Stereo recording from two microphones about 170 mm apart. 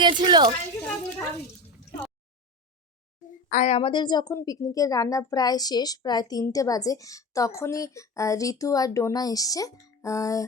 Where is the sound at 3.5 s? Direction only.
45° left (ahead or behind).